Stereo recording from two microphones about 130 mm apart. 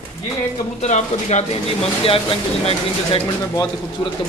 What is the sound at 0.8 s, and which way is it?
Speech, 65° left (ahead or behind).